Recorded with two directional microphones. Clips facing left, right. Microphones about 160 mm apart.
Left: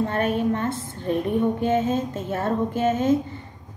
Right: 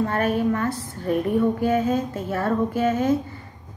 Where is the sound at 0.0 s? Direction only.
25° left (ahead or behind).